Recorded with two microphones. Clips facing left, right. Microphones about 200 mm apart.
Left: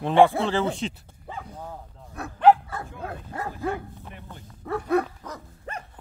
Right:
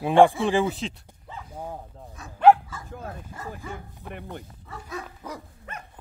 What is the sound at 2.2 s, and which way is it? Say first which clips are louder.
Dog: right 1 dB; 60° left (ahead or behind).